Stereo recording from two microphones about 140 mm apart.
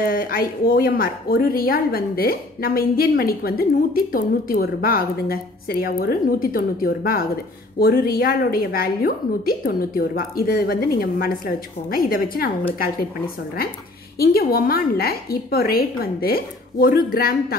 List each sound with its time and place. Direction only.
0.0 s speech: 90° left
14.1 s speech: 90° left